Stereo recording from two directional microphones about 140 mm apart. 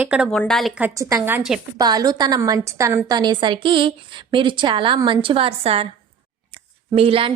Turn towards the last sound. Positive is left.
turn(degrees=-40)  # may be behind; listen again after turning